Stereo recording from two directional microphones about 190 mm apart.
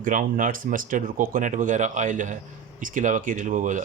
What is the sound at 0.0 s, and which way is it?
Speech, 45° right (ahead or behind).